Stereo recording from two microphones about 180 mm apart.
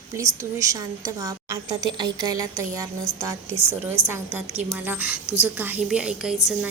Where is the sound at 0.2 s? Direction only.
15° right (ahead or behind).